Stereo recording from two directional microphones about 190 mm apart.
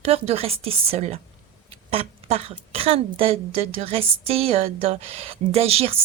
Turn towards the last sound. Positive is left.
turn(degrees=-30)  # may be behind; listen again after turning